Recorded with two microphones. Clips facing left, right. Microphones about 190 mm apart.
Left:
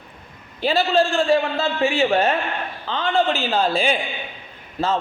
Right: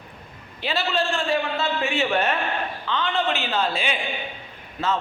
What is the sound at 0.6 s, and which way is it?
A man's voice, 40° left (ahead or behind).